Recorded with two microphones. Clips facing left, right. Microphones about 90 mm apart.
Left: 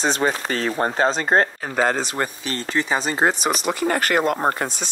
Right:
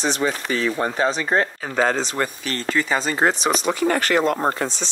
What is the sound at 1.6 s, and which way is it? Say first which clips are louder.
Speech: even; 5° left (ahead or behind).